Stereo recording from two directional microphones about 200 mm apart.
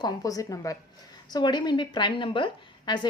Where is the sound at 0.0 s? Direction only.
15° left (ahead or behind).